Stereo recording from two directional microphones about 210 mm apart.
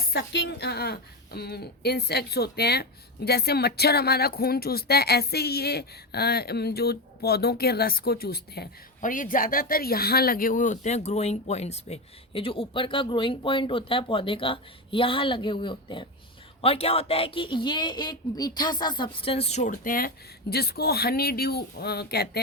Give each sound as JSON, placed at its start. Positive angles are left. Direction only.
{"t": 0.1, "sound": "speech", "side_deg": 50}